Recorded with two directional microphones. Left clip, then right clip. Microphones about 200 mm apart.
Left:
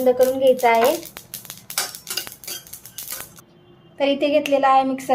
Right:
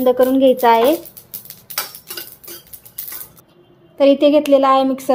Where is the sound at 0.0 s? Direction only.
35° right (ahead or behind).